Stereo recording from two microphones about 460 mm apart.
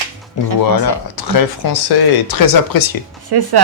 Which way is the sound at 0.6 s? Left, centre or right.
Left.